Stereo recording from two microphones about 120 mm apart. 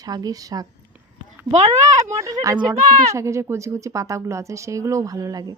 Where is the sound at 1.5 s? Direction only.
75° right (ahead or behind).